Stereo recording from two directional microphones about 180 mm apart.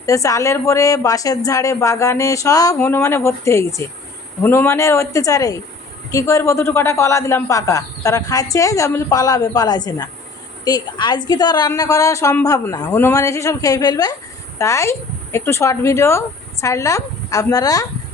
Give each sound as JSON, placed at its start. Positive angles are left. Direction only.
{"t": 0.0, "sound": "a woman's voice", "side_deg": 20}